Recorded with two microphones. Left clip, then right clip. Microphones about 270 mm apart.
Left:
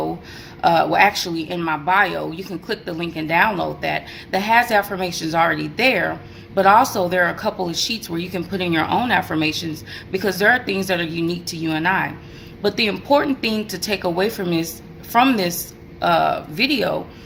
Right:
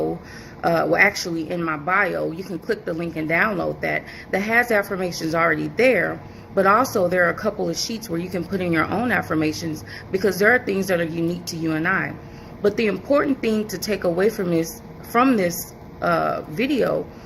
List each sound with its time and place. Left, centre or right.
0.6 s speech: centre